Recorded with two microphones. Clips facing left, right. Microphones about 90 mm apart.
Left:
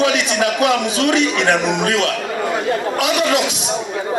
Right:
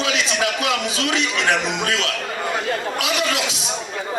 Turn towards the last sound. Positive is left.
turn(degrees=20)  # may be behind; listen again after turning